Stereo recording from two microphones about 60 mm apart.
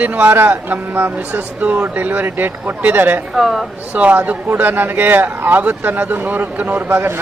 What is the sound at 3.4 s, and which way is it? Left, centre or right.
Speech, centre.